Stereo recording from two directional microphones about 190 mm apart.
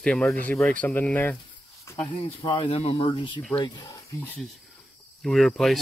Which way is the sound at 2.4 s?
25° left (ahead or behind).